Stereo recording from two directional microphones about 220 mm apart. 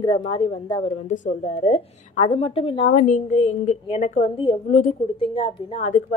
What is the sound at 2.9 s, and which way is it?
A woman's voice, 35° left (ahead or behind).